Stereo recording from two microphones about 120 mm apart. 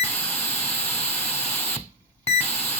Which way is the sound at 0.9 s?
60° left (ahead or behind).